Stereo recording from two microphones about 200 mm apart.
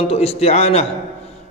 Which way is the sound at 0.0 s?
30° left (ahead or behind).